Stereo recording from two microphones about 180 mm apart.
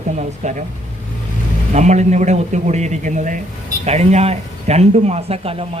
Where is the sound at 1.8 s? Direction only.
40° right (ahead or behind).